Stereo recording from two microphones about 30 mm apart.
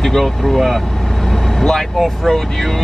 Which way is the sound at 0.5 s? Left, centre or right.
Centre.